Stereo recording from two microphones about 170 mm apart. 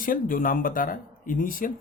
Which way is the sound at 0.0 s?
55° left (ahead or behind).